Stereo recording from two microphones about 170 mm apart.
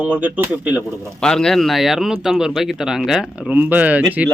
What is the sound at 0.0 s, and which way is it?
Speech, 10° right (ahead or behind).